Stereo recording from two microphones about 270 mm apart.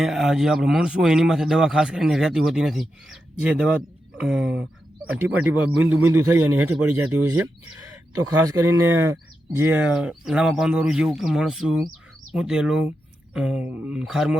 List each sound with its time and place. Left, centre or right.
0.0 s a man's voice: centre
8.6 s speech: right
9.6 s a man's voice: centre